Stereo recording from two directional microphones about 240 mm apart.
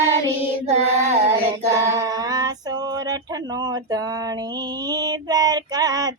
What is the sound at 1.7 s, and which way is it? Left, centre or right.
Female singing, centre.